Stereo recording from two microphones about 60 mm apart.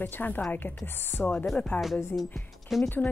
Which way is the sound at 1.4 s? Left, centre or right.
Centre.